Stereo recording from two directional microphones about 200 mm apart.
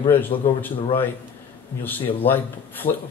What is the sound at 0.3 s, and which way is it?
Speech, 25° left (ahead or behind).